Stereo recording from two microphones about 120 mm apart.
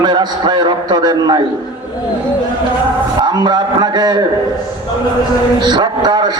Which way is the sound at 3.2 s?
35° right (ahead or behind).